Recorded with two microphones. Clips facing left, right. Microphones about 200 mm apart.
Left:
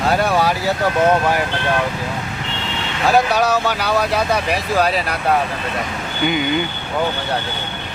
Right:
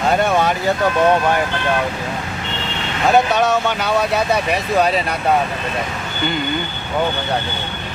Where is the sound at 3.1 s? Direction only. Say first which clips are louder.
Right 1 dB; centre (ahead or behind).